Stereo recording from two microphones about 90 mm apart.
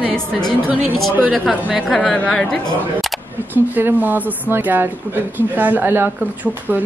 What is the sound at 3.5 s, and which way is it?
Speech, 20° right (ahead or behind).